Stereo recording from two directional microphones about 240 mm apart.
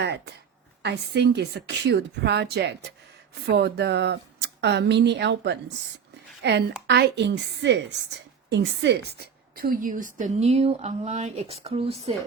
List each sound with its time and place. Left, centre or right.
0.0 s a woman's voice: right